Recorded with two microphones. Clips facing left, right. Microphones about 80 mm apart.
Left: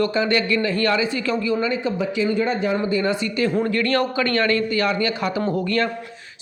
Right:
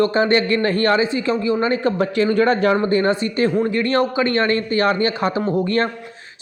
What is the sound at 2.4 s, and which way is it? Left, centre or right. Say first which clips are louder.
Speech: right 5 dB; right.